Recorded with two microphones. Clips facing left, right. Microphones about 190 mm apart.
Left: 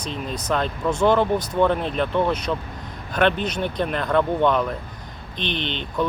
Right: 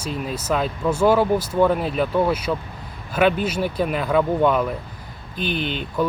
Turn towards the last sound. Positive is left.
turn(degrees=-5)  # may be behind; listen again after turning